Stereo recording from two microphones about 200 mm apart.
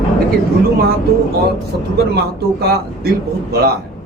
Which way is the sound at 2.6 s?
50° right (ahead or behind).